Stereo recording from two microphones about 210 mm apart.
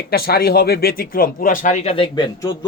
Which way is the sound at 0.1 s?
45° left (ahead or behind).